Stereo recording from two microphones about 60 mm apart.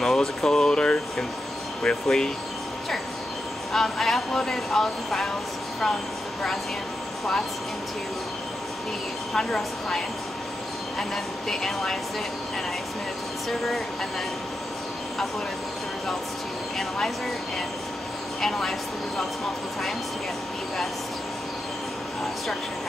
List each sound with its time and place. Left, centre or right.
0.0 s speech: centre
3.7 s speech: centre
9.3 s speech: centre
18.4 s speech: centre